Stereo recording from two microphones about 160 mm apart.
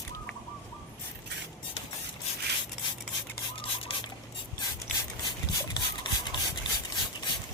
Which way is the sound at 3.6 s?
35° left (ahead or behind).